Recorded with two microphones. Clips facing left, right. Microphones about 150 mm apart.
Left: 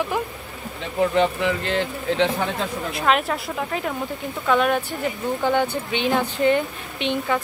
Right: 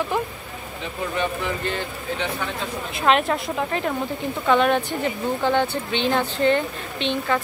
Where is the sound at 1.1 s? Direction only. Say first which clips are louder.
Left 5 dB; 90° left.